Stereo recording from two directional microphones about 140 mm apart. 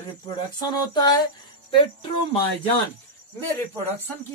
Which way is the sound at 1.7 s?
35° left (ahead or behind).